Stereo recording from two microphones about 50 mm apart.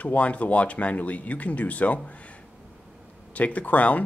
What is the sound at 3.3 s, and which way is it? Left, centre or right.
Speech, left.